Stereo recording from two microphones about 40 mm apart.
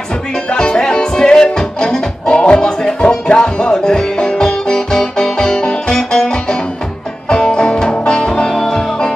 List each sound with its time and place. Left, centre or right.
0.5 s music: left
2.2 s music: left
4.7 s music: centre